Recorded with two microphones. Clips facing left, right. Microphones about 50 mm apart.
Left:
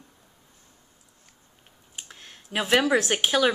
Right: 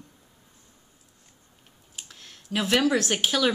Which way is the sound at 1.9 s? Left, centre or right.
Centre.